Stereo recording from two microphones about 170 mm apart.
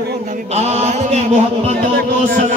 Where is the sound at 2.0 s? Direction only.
70° right (ahead or behind).